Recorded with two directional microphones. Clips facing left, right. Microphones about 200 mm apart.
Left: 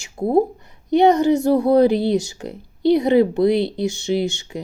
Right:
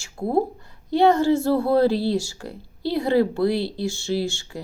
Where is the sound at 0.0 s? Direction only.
20° left (ahead or behind).